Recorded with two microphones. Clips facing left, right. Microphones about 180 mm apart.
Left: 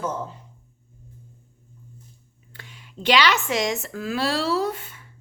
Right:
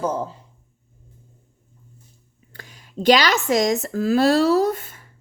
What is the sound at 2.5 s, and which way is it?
Speech, 40° right (ahead or behind).